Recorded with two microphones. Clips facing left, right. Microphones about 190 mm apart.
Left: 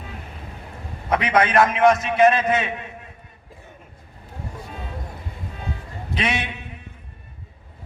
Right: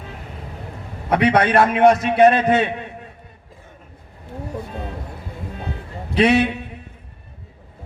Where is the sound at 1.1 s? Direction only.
35° right (ahead or behind).